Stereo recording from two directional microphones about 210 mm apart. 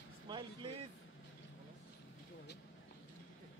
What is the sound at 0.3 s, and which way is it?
Vehicle, 20° right (ahead or behind).